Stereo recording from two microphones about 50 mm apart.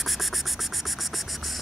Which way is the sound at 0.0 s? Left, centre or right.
Centre.